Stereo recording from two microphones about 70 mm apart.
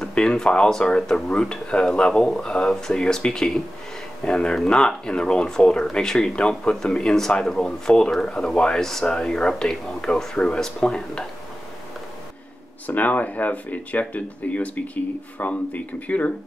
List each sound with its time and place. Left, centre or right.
0.0 s speech: centre
12.8 s speech: left